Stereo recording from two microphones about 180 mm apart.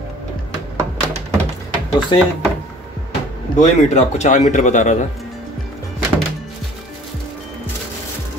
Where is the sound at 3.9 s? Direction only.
40° left (ahead or behind).